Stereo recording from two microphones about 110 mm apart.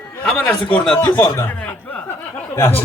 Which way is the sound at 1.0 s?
40° left (ahead or behind).